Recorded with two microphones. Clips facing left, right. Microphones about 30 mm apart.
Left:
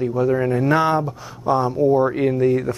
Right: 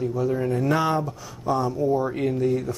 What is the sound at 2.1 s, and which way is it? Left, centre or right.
Speech, left.